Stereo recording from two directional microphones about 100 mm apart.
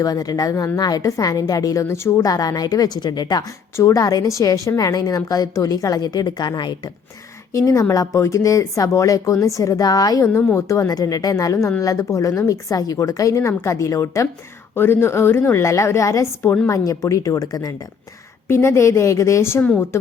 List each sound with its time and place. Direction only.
0.0 s speech: 40° left (ahead or behind)
7.5 s a woman's voice: 35° left (ahead or behind)
18.4 s a woman's voice: 25° left (ahead or behind)